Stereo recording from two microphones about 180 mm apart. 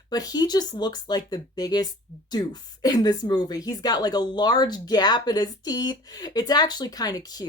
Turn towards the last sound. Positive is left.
turn(degrees=20)  # may be behind; listen again after turning